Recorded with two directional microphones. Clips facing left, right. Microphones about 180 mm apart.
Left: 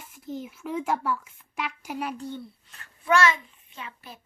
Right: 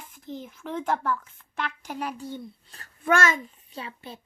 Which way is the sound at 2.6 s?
35° right (ahead or behind).